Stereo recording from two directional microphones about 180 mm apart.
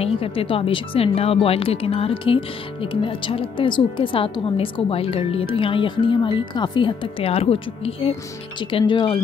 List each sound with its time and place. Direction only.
0.0 s speech: 30° left (ahead or behind)